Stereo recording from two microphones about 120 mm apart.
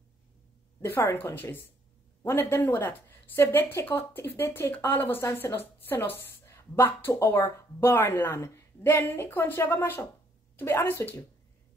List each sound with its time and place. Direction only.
0.7 s speech: 20° left (ahead or behind)